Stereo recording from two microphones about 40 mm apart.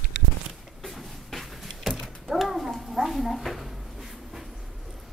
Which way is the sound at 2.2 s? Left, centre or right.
Centre.